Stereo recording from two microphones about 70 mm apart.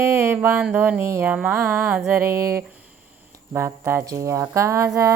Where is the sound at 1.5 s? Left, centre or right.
Right.